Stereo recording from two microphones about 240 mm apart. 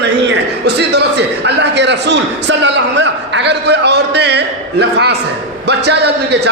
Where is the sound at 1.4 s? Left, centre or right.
Right.